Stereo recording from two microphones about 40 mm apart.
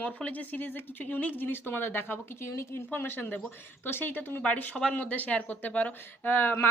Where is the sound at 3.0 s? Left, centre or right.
Left.